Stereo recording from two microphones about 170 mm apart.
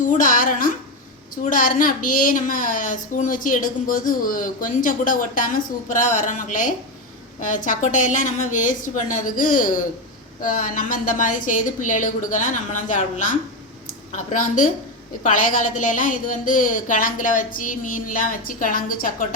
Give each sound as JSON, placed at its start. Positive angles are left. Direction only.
{"t": 0.1, "sound": "a woman's voice", "side_deg": 50}